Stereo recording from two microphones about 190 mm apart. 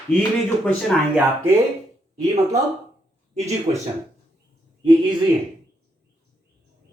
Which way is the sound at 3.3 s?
35° right (ahead or behind).